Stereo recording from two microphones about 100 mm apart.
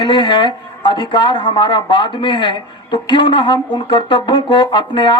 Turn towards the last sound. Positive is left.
turn(degrees=50)  # may be behind; listen again after turning